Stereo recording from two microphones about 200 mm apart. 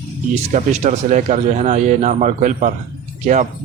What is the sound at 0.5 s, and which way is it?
Speech, 35° right (ahead or behind).